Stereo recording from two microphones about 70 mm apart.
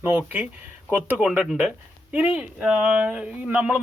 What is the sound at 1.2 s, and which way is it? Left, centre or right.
Speech, centre.